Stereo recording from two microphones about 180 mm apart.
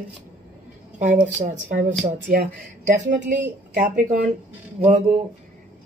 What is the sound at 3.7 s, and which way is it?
Speech, 50° right (ahead or behind).